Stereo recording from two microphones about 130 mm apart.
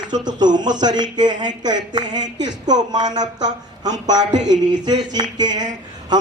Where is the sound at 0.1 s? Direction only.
30° right (ahead or behind).